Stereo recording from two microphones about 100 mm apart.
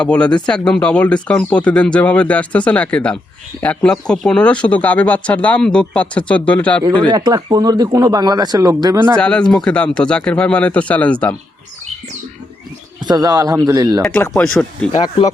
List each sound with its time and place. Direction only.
0.0 s speech: 10° left (ahead or behind)
7.1 s speech: 40° right (ahead or behind)
9.1 s speech: 10° left (ahead or behind)
13.1 s speech: 40° right (ahead or behind)
14.2 s speech: 15° left (ahead or behind)
14.9 s speech: 90° left